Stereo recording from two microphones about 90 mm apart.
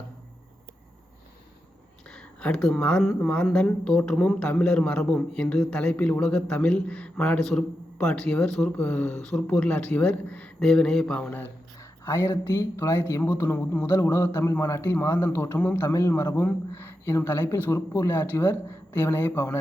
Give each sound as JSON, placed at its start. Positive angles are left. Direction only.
{"t": 2.0, "sound": "a sound", "side_deg": 10}
{"t": 2.7, "sound": "speech", "side_deg": 10}
{"t": 11.3, "sound": "speech", "side_deg": 25}
{"t": 11.8, "sound": "speech", "side_deg": 35}